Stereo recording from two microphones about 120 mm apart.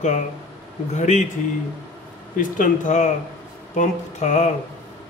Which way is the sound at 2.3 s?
90° left.